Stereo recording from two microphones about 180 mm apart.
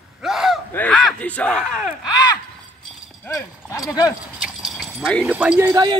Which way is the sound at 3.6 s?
20° left (ahead or behind).